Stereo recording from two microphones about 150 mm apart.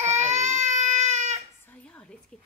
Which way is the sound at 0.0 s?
50° right (ahead or behind).